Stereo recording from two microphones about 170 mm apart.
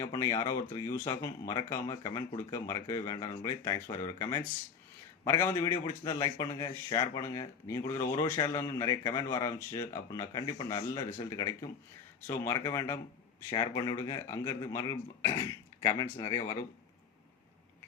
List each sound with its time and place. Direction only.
0.0 s a man's voice: 20° left (ahead or behind)